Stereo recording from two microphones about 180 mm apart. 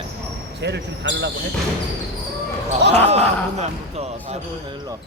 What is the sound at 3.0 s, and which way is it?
Speech, 35° right (ahead or behind).